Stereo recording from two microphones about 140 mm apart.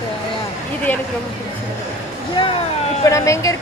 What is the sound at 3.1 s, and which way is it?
Speech, 20° left (ahead or behind).